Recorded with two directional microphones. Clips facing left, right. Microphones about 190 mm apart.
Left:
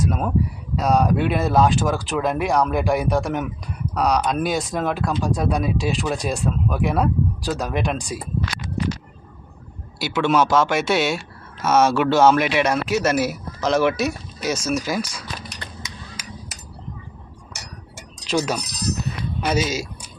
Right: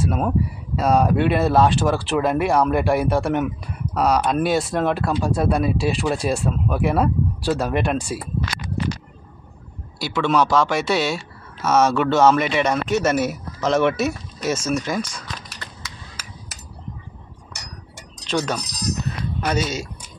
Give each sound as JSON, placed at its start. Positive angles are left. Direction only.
{"t": 0.0, "sound": "speech", "side_deg": -5}
{"t": 10.0, "sound": "speech", "side_deg": 0}
{"t": 15.6, "sound": "a sound", "side_deg": 15}
{"t": 17.5, "sound": "chink", "side_deg": 5}
{"t": 19.5, "sound": "speech", "side_deg": 5}